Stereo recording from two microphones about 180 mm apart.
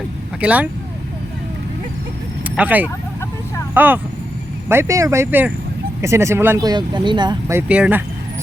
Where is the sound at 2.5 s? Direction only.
10° right (ahead or behind).